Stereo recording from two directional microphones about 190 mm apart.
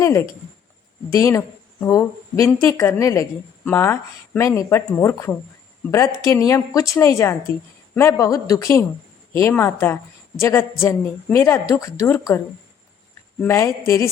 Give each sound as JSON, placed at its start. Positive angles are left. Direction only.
{"t": 0.0, "sound": "speech", "side_deg": 15}
{"t": 13.4, "sound": "speech", "side_deg": 15}